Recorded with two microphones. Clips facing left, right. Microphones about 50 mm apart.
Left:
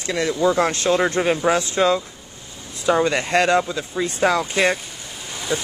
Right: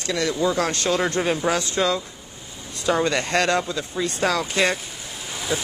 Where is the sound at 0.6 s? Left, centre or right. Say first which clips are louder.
Left 4 dB; left.